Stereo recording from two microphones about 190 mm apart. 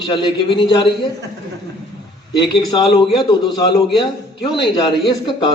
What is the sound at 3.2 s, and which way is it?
A man's voice, 25° left (ahead or behind).